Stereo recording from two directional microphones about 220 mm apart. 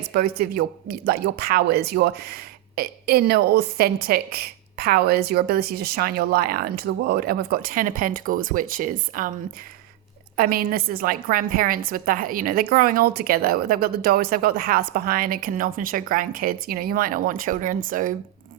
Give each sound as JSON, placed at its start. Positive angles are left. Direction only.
{"t": 0.1, "sound": "speech", "side_deg": -45}
{"t": 10.3, "sound": "a woman's voice", "side_deg": -40}